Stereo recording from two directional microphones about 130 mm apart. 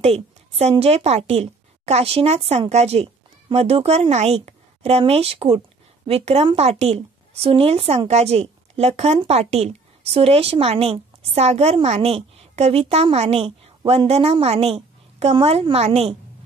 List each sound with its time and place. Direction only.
0.0 s a woman's voice: 50° right (ahead or behind)